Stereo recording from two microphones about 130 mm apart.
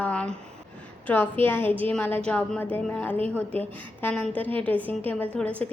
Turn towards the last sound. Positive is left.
turn(degrees=10)  # may be behind; listen again after turning